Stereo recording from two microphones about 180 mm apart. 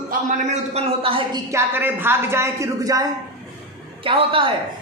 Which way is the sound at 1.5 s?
10° right (ahead or behind).